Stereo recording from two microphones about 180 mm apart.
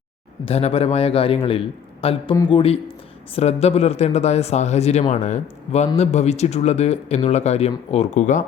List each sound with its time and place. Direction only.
0.4 s speech: 35° left (ahead or behind)
2.3 s speech: 20° left (ahead or behind)
2.6 s speech: 30° left (ahead or behind)